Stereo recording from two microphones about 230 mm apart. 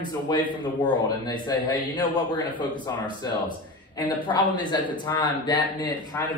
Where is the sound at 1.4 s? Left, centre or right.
Centre.